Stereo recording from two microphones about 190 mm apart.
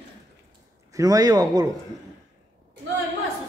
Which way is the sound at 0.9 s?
20° right (ahead or behind).